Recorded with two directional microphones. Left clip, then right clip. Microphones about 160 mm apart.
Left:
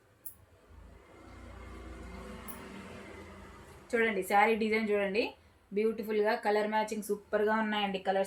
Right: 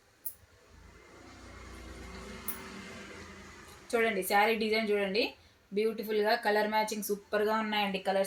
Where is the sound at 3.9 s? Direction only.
5° left (ahead or behind).